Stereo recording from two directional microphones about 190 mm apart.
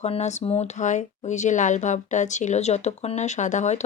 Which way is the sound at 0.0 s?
35° left (ahead or behind).